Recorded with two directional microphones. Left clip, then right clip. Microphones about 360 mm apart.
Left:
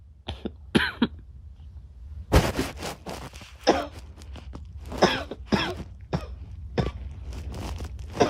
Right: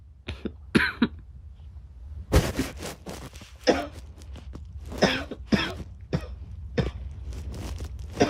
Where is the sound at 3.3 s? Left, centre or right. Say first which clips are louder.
Left 1 dB; centre.